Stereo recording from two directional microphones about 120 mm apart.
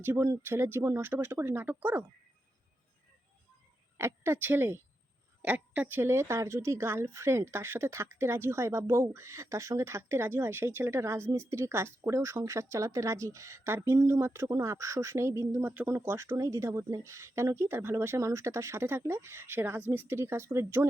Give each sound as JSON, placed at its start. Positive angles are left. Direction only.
{"t": 0.0, "sound": "speech", "side_deg": -20}
{"t": 3.9, "sound": "speech", "side_deg": -20}